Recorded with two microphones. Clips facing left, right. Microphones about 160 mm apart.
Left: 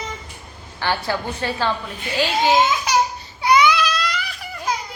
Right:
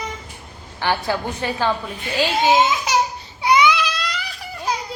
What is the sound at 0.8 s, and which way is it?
A woman's voice, 15° right (ahead or behind).